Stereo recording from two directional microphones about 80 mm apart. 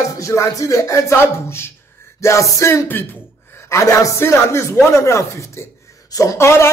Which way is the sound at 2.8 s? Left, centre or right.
Left.